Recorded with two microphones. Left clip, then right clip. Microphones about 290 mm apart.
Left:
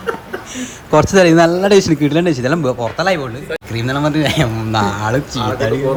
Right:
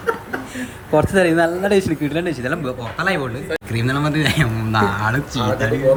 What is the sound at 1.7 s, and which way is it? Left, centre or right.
Speech, centre.